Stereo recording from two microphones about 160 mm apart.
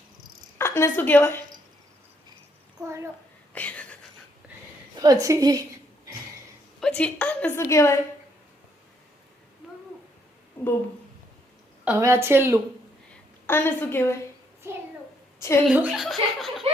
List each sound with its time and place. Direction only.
0.6 s a woman's voice: 15° left (ahead or behind)
2.8 s a woman's voice: 20° right (ahead or behind)
3.5 s a sound: 10° left (ahead or behind)
4.9 s a woman's voice: 25° right (ahead or behind)
6.7 s a woman's voice: 5° left (ahead or behind)
7.6 s a woman's voice: 20° left (ahead or behind)
10.6 s a sound: 15° left (ahead or behind)
11.9 s a woman's voice: 15° right (ahead or behind)
13.5 s a woman's voice: 15° left (ahead or behind)
15.7 s speech: 5° right (ahead or behind)